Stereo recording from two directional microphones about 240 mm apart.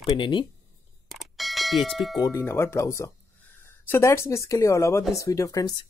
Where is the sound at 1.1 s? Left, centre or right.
Centre.